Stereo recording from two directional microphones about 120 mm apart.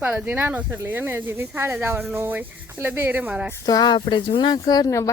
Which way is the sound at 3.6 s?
35° left (ahead or behind).